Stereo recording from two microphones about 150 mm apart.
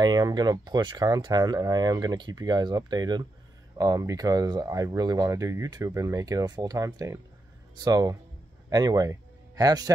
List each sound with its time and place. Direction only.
0.0 s speech: 25° right (ahead or behind)